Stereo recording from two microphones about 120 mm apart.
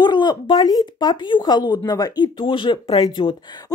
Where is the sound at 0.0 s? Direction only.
35° left (ahead or behind).